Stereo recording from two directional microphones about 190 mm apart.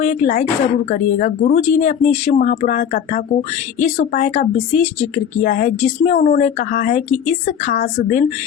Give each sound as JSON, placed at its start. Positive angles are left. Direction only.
{"t": 0.0, "sound": "speech", "side_deg": 40}